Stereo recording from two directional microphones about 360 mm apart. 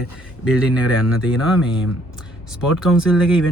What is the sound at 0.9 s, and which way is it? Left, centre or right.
Speech, left.